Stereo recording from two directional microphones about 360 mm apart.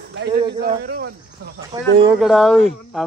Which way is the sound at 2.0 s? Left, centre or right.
Centre.